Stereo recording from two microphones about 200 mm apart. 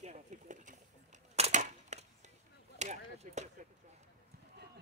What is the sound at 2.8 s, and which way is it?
Arrow, 35° right (ahead or behind).